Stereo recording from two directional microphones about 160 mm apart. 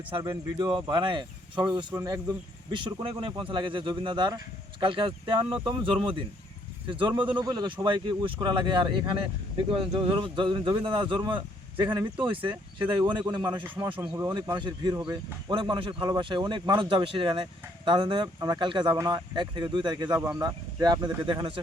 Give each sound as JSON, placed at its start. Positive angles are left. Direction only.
{"t": 0.1, "sound": "speech", "side_deg": -30}
{"t": 2.7, "sound": "speech", "side_deg": -30}